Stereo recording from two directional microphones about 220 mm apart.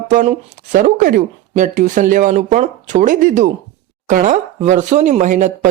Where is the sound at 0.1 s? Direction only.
35° right (ahead or behind).